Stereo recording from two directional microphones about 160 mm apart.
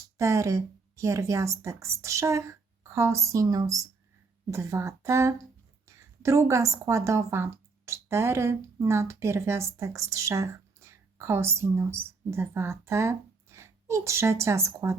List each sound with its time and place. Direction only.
0.2 s a woman's voice: 20° right (ahead or behind)